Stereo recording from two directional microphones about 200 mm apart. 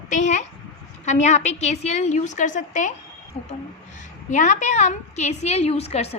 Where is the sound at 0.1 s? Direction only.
35° left (ahead or behind).